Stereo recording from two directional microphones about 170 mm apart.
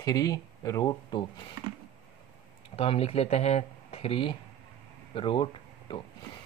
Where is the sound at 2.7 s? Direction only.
35° left (ahead or behind).